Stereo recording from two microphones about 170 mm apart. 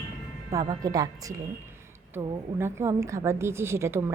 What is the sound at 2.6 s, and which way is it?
A woman's voice, 15° right (ahead or behind).